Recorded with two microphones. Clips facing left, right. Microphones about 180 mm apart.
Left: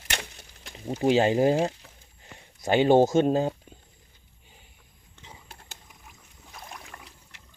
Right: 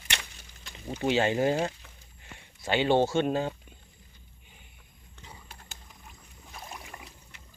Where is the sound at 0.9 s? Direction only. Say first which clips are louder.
Left 5 dB; 35° left (ahead or behind).